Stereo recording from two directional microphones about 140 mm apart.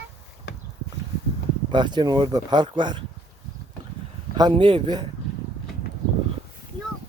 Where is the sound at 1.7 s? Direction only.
35° right (ahead or behind).